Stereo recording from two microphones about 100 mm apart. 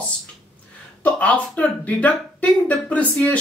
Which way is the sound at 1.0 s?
15° left (ahead or behind).